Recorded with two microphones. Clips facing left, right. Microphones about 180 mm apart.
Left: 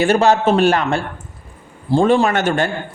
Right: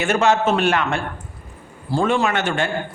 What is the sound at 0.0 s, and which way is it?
A man's voice, 35° left (ahead or behind).